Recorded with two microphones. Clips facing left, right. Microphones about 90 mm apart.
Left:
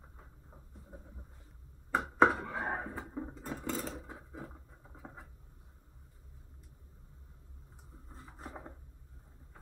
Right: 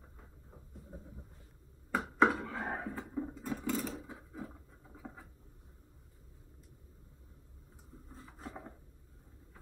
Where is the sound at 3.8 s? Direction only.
20° left (ahead or behind).